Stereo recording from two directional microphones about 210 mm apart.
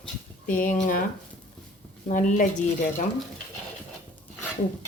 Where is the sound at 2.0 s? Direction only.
35° left (ahead or behind).